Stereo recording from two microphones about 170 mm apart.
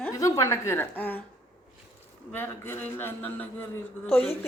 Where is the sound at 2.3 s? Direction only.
10° left (ahead or behind).